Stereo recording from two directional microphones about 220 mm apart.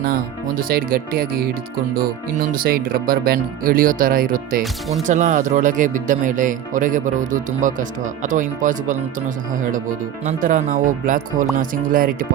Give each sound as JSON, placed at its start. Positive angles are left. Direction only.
{"t": 0.0, "sound": "speech", "side_deg": -40}
{"t": 4.6, "sound": "speech", "side_deg": 0}
{"t": 5.0, "sound": "speech", "side_deg": -35}
{"t": 10.2, "sound": "speech", "side_deg": -35}